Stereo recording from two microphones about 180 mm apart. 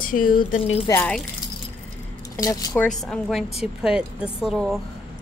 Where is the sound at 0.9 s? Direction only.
10° left (ahead or behind).